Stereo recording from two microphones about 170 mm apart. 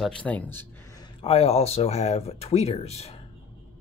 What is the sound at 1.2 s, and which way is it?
Speech, 35° left (ahead or behind).